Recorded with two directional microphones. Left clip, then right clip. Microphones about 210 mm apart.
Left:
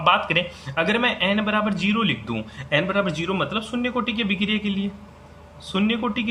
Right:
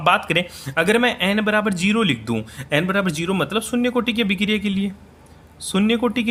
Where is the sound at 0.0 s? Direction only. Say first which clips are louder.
Right 1 dB; 55° right (ahead or behind).